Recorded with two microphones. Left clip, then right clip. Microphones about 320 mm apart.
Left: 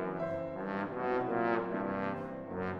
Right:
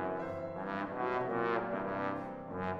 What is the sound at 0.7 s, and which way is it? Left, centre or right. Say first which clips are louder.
Music: left 1 dB; right.